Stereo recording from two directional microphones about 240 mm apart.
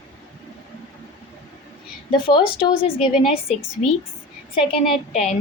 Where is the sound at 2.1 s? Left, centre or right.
Left.